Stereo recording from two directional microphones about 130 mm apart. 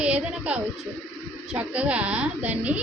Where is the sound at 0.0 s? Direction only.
10° right (ahead or behind).